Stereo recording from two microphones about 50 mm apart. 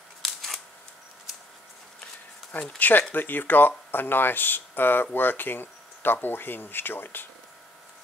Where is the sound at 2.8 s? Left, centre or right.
Left.